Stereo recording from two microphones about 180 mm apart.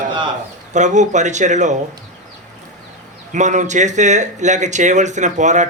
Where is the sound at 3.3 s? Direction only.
40° right (ahead or behind).